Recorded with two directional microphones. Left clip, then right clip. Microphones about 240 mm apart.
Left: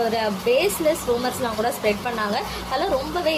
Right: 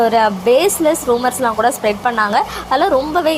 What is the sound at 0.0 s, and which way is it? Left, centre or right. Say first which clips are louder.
A woman's voice: right 9 dB; right.